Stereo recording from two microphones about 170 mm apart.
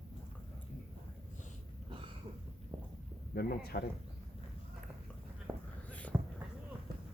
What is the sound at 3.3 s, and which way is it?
Speech, 65° left (ahead or behind).